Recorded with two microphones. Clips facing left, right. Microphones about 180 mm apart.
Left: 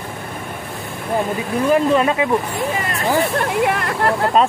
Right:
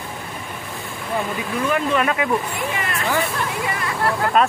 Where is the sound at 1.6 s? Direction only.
30° left (ahead or behind).